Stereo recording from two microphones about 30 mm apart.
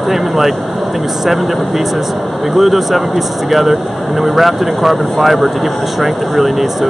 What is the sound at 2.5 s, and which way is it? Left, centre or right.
Speech, centre.